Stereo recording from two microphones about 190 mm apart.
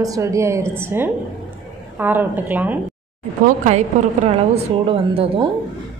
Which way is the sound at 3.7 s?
35° right (ahead or behind).